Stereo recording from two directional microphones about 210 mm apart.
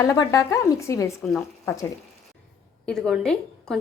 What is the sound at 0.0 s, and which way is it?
Speech, 15° left (ahead or behind).